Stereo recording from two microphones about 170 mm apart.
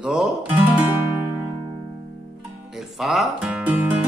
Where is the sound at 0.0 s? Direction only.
5° right (ahead or behind).